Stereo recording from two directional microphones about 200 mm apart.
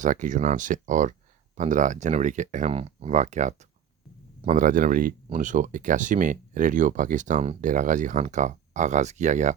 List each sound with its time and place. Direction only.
0.0 s speech: 40° right (ahead or behind)